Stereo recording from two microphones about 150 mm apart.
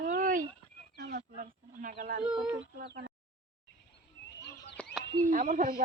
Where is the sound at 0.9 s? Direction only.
90° right.